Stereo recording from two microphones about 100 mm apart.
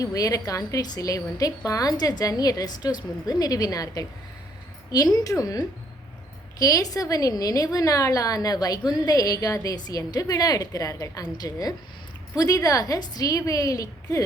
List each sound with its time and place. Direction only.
0.0 s a woman's voice: 35° left (ahead or behind)